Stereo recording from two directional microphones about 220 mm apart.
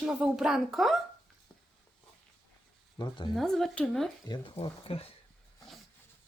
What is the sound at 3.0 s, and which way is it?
Speech, 20° left (ahead or behind).